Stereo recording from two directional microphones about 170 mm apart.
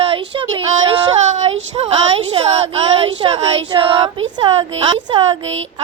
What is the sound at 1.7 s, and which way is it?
A child's voice, 35° right (ahead or behind).